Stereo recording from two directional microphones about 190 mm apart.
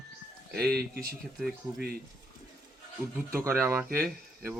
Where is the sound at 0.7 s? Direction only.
55° right (ahead or behind).